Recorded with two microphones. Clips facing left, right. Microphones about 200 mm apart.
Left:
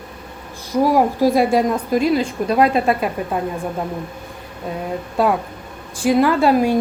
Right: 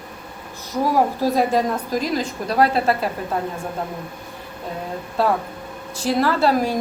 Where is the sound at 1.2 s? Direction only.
10° left (ahead or behind).